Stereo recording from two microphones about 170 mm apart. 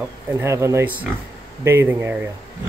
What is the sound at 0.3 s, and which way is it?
Speech, 15° right (ahead or behind).